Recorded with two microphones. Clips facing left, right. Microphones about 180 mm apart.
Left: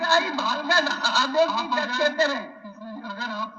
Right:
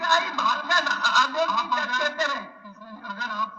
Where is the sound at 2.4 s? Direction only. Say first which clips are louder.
Left 5 dB; 35° left (ahead or behind).